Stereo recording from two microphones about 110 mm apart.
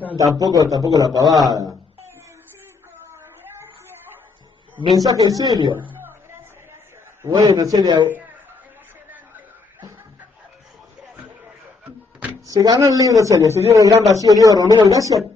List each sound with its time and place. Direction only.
0.4 s a man's voice: 35° right (ahead or behind)
4.7 s a man's voice: 40° right (ahead or behind)
5.8 s a sound: 20° right (ahead or behind)
7.2 s a man's voice: 35° right (ahead or behind)
12.4 s a man's voice: 35° right (ahead or behind)